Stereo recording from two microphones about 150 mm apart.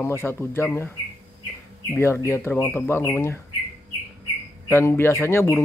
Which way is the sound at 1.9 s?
15° left (ahead or behind).